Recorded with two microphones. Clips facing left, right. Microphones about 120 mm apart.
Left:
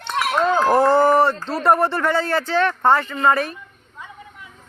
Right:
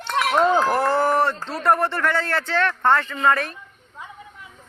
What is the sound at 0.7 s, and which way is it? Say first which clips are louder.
Speech: left 5 dB; 20° left (ahead or behind).